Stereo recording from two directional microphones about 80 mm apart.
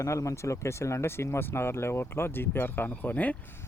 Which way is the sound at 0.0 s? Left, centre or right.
Left.